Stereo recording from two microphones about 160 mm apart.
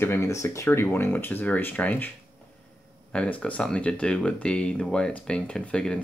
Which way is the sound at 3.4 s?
5° left (ahead or behind).